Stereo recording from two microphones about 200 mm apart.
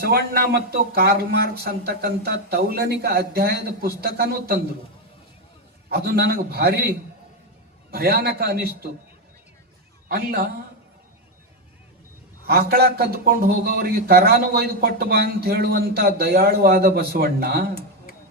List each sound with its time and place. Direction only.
0.0 s a man's voice: 50° right (ahead or behind)
5.9 s a man's voice: 50° right (ahead or behind)
10.1 s a man's voice: 50° right (ahead or behind)
12.5 s a man's voice: 50° right (ahead or behind)